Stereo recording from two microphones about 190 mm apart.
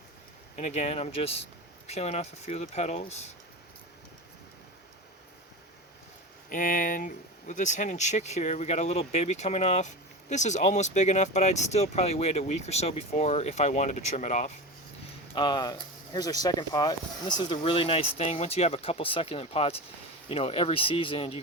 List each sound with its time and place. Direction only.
0.5 s speech: 35° left (ahead or behind)
6.5 s speech: 45° left (ahead or behind)
15.4 s speech: 25° left (ahead or behind)